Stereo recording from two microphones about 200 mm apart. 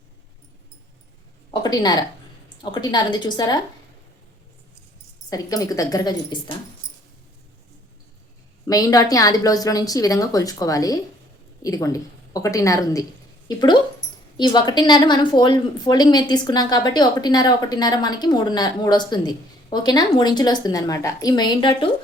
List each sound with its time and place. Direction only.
1.5 s a sound: 20° left (ahead or behind)
2.7 s a woman's voice: 20° left (ahead or behind)
5.3 s a woman's voice: 20° left (ahead or behind)
8.6 s a woman's voice: 20° left (ahead or behind)
14.3 s a woman's voice: 20° left (ahead or behind)